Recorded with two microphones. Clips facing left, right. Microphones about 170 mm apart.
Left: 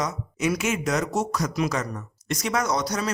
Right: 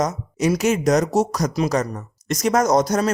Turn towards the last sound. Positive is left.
turn(degrees=-45)  # may be behind; listen again after turning